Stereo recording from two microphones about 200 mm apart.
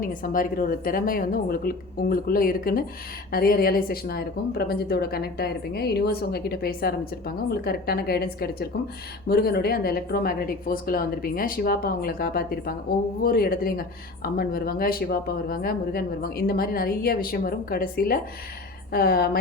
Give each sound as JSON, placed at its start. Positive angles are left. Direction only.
{"t": 0.0, "sound": "speech", "side_deg": 40}